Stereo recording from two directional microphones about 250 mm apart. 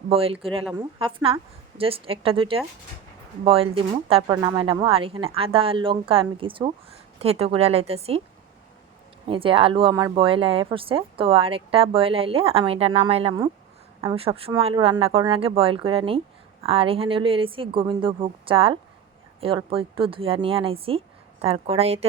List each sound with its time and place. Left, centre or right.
0.1 s speech: right
9.2 s speech: right